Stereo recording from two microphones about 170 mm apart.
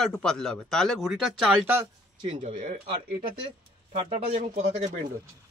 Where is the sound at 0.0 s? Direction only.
5° left (ahead or behind).